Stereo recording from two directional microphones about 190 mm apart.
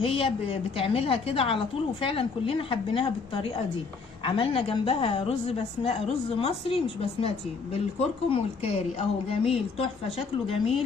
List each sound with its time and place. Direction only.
0.0 s a woman's voice: 30° left (ahead or behind)